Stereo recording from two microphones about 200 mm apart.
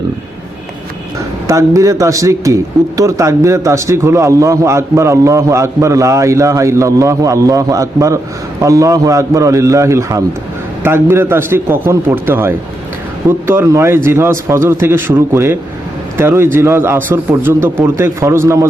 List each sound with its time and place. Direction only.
1.5 s speech: 15° right (ahead or behind)